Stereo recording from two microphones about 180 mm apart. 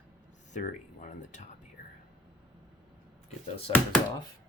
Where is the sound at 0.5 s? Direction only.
45° left (ahead or behind).